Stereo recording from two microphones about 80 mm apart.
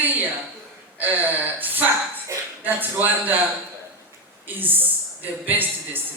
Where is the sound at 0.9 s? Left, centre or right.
Right.